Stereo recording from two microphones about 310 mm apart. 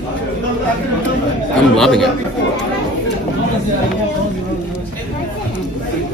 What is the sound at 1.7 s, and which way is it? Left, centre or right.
Speech, centre.